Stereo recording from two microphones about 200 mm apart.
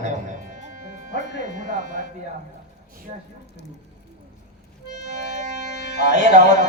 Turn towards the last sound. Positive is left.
turn(degrees=-40)  # may be behind; listen again after turning